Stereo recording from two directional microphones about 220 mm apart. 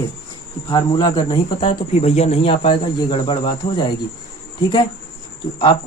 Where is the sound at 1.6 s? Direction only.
30° left (ahead or behind).